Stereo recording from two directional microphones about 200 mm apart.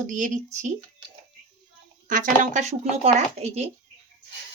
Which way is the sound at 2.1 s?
40° right (ahead or behind).